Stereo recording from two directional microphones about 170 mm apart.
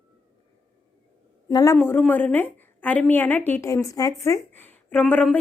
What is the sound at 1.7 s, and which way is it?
Speech, 10° left (ahead or behind).